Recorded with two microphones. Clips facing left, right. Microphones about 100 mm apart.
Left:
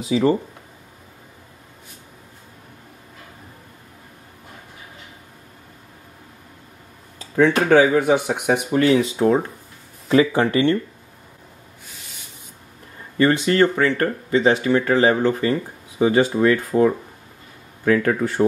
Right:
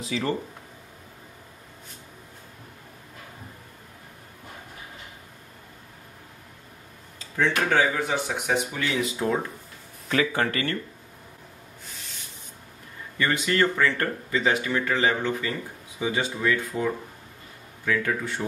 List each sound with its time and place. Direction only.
0.1 s speech: 30° left (ahead or behind)
7.7 s speech: 55° left (ahead or behind)
8.8 s speech: 35° left (ahead or behind)
13.2 s speech: 30° left (ahead or behind)
16.0 s speech: 50° left (ahead or behind)